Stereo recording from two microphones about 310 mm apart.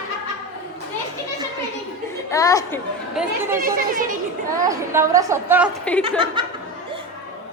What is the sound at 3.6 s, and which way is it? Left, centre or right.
Speech, right.